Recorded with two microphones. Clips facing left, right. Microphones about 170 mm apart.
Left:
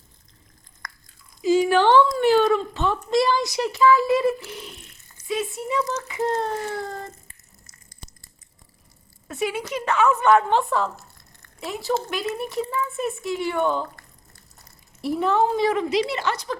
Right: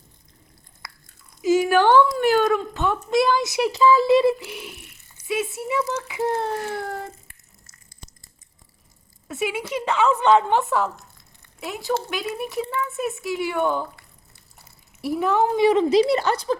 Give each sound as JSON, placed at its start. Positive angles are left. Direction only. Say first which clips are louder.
{"t": 0.8, "sound": "biting", "louder": "left 2 dB", "side_deg": -5}
{"t": 1.5, "sound": "a sound", "louder": "even", "side_deg": 0}
{"t": 2.5, "sound": "speech", "louder": "even", "side_deg": 0}
{"t": 3.8, "sound": "speech", "louder": "even", "side_deg": -30}
{"t": 4.1, "sound": "speech", "louder": "right 4 dB", "side_deg": -15}
{"t": 9.2, "sound": "speech", "louder": "even", "side_deg": -5}
{"t": 10.6, "sound": "speech", "louder": "right 1 dB", "side_deg": -5}
{"t": 14.6, "sound": "a sound", "louder": "even", "side_deg": 0}
{"t": 15.8, "sound": "a woman's voice", "louder": "right 6 dB", "side_deg": -35}